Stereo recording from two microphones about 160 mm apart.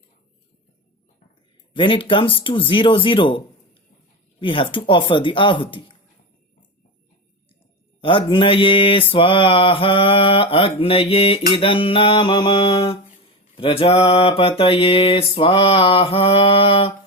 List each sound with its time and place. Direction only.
1.7 s mantra: 30° left (ahead or behind)
8.0 s mantra: 35° left (ahead or behind)